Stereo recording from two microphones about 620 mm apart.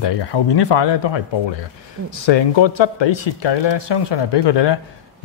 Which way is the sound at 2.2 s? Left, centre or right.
Left.